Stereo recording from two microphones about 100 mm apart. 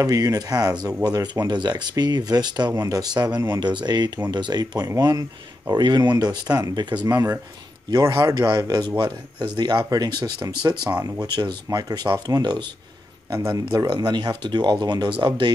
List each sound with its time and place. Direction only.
0.0 s speech: 40° right (ahead or behind)
8.2 s speech: 40° right (ahead or behind)
13.3 s speech: 30° right (ahead or behind); by 15.5 s 55° right (ahead or behind)